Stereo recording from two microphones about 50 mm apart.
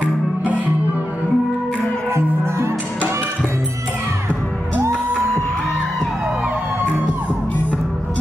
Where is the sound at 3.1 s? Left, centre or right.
Right.